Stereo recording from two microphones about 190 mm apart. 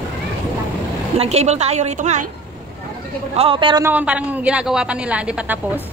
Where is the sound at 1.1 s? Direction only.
35° right (ahead or behind).